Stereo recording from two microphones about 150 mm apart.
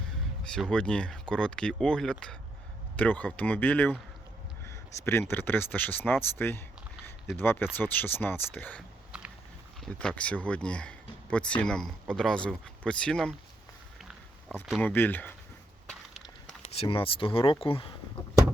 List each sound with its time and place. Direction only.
0.4 s speech: 5° left (ahead or behind)
9.8 s speech: 5° left (ahead or behind)
14.8 s speech: 10° left (ahead or behind)
15.9 s crushing: centre (ahead or behind)
16.6 s speech: 40° left (ahead or behind)